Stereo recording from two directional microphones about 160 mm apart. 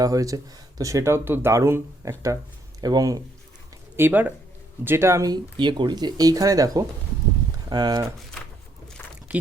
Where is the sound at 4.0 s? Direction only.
10° right (ahead or behind).